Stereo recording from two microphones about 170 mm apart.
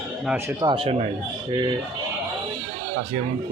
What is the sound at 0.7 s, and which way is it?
Speech, 35° right (ahead or behind).